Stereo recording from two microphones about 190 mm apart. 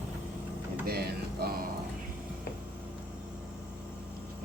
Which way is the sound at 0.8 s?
55° right (ahead or behind).